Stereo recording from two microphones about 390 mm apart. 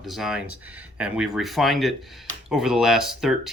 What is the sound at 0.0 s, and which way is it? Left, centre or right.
Speech, centre.